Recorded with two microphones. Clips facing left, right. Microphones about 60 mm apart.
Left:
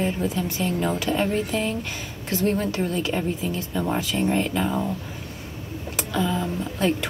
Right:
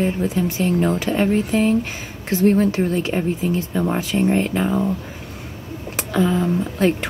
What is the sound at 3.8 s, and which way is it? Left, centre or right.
Speech, centre.